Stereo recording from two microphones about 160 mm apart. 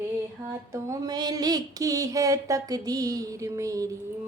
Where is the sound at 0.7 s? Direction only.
20° right (ahead or behind).